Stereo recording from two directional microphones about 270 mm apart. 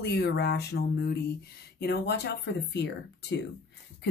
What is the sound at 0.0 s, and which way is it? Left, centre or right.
Speech, left.